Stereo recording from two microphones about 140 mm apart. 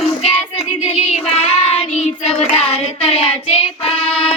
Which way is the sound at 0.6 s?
50° left (ahead or behind).